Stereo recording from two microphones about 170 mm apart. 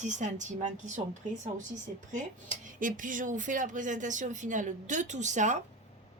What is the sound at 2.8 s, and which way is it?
A woman's voice, 50° right (ahead or behind).